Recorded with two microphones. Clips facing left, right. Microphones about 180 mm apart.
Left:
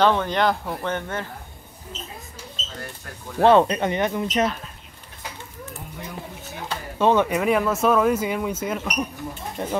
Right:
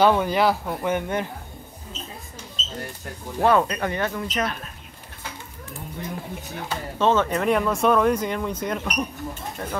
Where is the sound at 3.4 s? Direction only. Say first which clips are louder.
Left 4 dB; 25° left (ahead or behind).